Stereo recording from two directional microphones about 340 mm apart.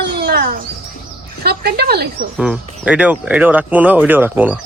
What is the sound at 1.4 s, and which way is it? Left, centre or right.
Speech, right.